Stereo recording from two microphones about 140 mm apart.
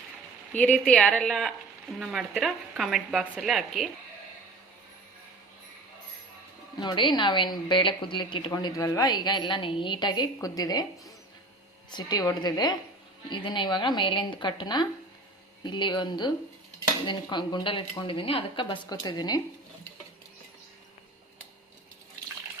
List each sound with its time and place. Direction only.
0.5 s speech: 5° left (ahead or behind)
6.8 s a woman's voice: 35° left (ahead or behind)